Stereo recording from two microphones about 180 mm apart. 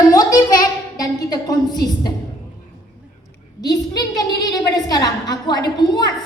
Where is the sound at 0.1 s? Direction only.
20° left (ahead or behind).